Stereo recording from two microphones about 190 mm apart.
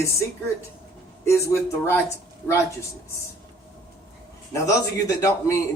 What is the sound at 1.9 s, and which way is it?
Speech, 15° left (ahead or behind).